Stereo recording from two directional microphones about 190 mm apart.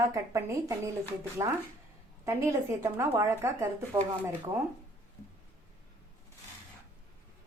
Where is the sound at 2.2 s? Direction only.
15° right (ahead or behind).